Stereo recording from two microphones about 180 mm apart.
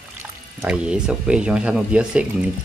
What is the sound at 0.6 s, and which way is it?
Speech, 5° right (ahead or behind).